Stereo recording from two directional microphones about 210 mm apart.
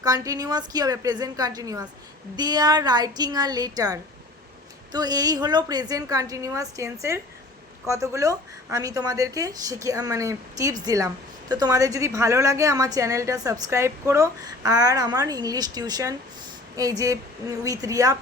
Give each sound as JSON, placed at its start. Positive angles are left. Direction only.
{"t": 0.0, "sound": "a woman's voice", "side_deg": -15}